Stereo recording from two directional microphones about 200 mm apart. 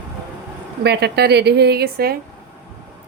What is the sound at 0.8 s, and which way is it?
Speech, 55° right (ahead or behind).